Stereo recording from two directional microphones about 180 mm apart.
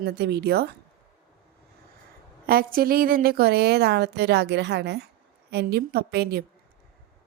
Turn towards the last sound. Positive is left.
turn(degrees=-65)  # may be behind; listen again after turning